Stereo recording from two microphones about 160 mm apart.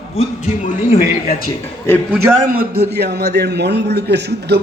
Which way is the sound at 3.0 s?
90° right.